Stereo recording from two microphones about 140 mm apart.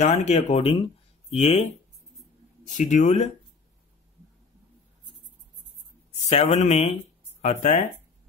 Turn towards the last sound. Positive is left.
turn(degrees=55)  # may be behind; listen again after turning